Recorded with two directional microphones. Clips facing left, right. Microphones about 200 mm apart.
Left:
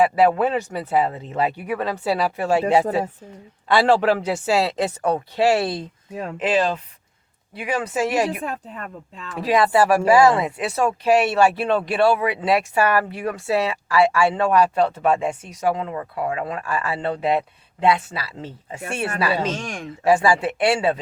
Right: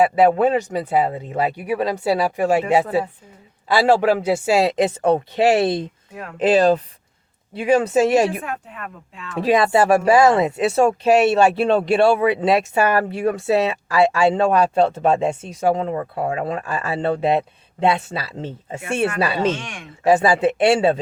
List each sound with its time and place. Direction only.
0.2 s speech: 20° right (ahead or behind)
6.4 s speech: 35° right (ahead or behind)
7.5 s speech: 25° right (ahead or behind)
8.4 s speech: 35° left (ahead or behind)
9.3 s speech: 25° right (ahead or behind)
19.5 s speech: 40° left (ahead or behind)
20.1 s speech: 20° right (ahead or behind)